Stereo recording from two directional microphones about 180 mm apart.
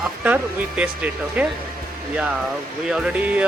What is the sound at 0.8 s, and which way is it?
Speech, 10° right (ahead or behind).